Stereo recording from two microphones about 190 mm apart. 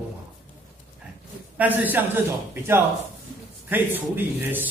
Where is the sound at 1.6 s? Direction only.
10° right (ahead or behind).